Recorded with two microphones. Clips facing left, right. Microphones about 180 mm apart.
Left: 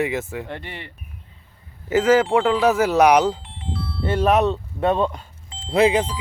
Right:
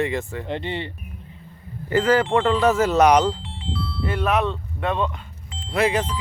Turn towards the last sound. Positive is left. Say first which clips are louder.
# left 4 dB
turn(degrees=25)  # may be behind; listen again after turning